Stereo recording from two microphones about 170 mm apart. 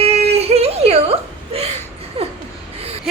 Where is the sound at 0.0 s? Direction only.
35° right (ahead or behind).